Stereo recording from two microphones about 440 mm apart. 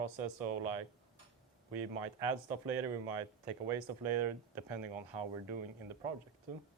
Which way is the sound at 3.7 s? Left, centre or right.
Right.